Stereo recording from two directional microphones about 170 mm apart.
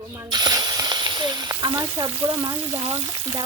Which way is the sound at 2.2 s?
20° right (ahead or behind).